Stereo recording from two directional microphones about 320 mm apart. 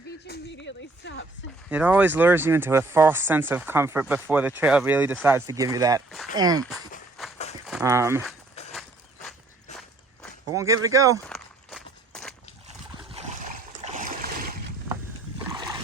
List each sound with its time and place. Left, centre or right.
0.3 s speech: left
1.7 s speech: centre
7.7 s speech: centre
10.5 s speech: centre
11.3 s walk: centre
12.6 s boat: centre
15.5 s boat: centre